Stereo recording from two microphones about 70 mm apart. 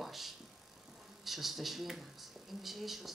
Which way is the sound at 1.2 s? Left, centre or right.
Centre.